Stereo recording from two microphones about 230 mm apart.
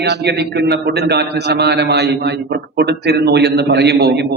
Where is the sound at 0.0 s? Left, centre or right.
Right.